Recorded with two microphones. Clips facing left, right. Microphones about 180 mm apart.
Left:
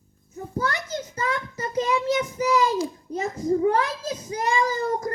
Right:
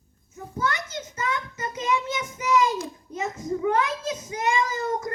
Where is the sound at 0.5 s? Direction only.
35° left (ahead or behind).